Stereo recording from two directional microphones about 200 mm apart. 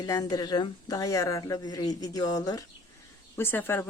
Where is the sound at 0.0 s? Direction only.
20° left (ahead or behind).